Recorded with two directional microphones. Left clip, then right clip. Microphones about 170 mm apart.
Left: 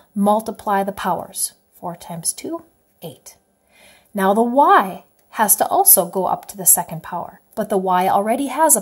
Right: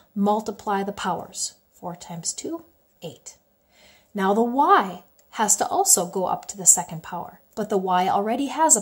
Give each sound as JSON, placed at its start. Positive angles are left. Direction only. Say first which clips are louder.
{"t": 0.2, "sound": "speech", "louder": "left 6 dB", "side_deg": 25}